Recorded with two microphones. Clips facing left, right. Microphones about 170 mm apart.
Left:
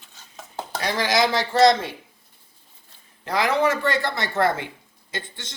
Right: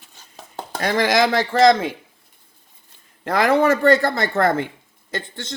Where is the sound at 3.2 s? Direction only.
50° right (ahead or behind).